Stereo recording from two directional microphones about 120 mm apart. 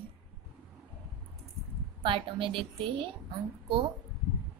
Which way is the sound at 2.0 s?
45° right (ahead or behind).